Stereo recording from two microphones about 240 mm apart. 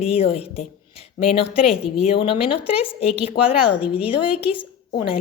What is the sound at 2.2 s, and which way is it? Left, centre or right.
Speech, left.